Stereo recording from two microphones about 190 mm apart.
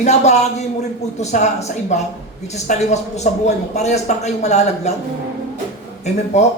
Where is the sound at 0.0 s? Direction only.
35° left (ahead or behind).